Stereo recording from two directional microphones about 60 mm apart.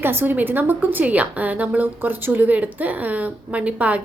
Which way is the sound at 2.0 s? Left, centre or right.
Right.